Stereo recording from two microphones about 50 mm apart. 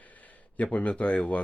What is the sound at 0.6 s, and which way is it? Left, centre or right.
Speech, left.